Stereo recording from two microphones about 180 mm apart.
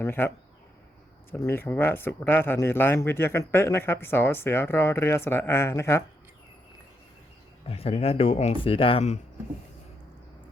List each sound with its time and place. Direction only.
0.0 s speech: 15° left (ahead or behind)
1.3 s a man's voice: 15° left (ahead or behind)
7.7 s speech: 35° left (ahead or behind)